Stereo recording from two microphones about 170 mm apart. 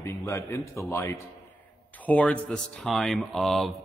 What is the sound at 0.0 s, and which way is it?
A man's voice, 15° left (ahead or behind).